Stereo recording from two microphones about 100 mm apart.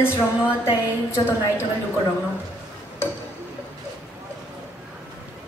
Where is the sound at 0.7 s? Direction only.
25° left (ahead or behind).